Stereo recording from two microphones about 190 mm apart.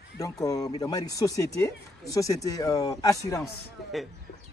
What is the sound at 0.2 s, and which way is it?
Speech, 20° left (ahead or behind).